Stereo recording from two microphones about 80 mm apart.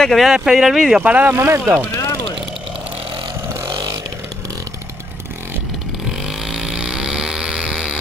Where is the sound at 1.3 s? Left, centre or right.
Right.